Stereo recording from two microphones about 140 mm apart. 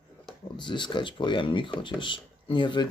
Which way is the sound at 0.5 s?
35° left (ahead or behind).